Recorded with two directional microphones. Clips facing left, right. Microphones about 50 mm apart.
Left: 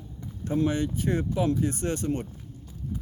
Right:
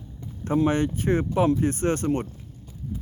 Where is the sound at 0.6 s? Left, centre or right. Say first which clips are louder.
Right 3 dB; right.